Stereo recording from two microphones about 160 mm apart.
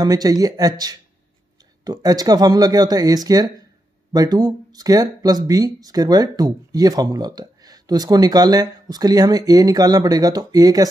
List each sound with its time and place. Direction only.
0.0 s speech: 25° right (ahead or behind)